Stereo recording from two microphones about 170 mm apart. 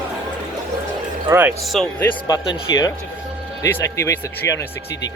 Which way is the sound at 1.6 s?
Centre (ahead or behind).